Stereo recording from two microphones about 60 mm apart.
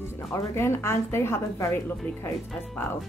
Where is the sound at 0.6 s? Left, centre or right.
Left.